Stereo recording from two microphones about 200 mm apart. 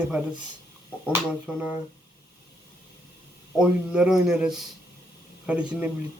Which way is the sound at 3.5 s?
5° right (ahead or behind).